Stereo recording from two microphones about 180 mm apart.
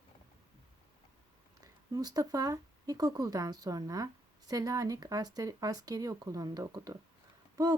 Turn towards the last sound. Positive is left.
turn(degrees=-20)  # may be behind; listen again after turning